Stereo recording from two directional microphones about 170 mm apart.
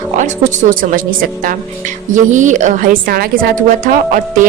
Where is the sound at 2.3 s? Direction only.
45° right (ahead or behind).